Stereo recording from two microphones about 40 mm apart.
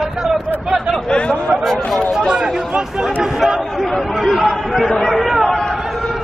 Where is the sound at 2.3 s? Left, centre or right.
Centre.